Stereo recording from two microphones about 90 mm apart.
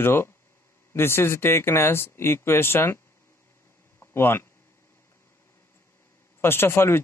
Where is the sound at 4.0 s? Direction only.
25° left (ahead or behind).